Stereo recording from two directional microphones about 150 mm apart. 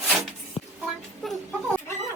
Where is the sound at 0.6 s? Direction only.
35° left (ahead or behind).